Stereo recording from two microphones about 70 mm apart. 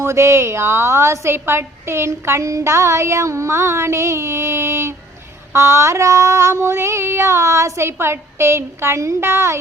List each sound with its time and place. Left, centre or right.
0.0 s a woman's voice: right